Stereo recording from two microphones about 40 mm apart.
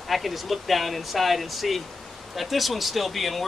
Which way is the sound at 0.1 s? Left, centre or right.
Centre.